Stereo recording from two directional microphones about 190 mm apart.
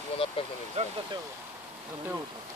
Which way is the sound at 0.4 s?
30° left (ahead or behind).